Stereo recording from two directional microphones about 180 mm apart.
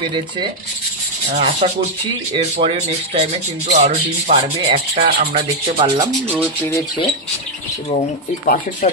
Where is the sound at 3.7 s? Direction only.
35° right (ahead or behind).